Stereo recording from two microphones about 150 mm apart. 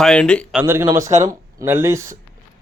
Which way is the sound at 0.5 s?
15° right (ahead or behind).